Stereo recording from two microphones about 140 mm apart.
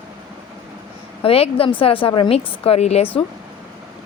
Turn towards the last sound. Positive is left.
turn(degrees=50)  # may be behind; listen again after turning